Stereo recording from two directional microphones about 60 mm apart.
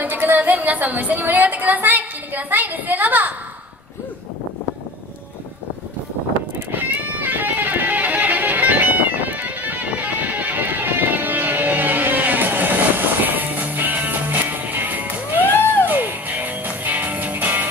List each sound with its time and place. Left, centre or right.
0.0 s a woman's voice: right
6.7 s music: right